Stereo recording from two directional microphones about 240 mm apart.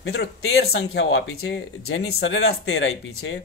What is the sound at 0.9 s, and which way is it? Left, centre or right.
Speech, left.